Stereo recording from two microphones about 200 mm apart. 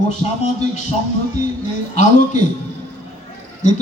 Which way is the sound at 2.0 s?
40° left (ahead or behind).